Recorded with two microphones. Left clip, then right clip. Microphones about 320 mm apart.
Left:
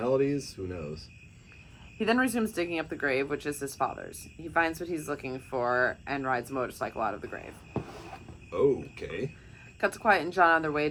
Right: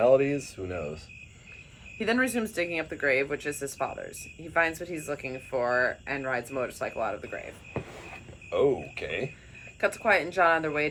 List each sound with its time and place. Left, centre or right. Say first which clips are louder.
0.0 s a sound: right 6 dB; centre
0.6 s cricket: right 2 dB; centre
2.0 s speech: even; centre
8.4 s speech: right 1 dB; centre
9.8 s speech: right 1 dB; centre